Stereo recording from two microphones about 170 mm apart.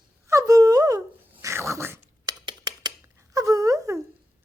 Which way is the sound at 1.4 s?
15° right (ahead or behind).